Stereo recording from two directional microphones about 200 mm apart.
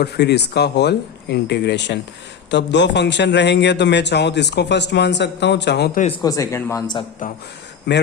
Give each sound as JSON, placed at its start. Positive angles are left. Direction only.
{"t": 0.0, "sound": "a man's voice", "side_deg": 55}
{"t": 6.2, "sound": "speech", "side_deg": 15}